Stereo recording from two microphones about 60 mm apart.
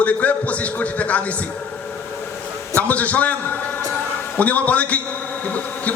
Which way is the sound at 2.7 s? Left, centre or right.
Left.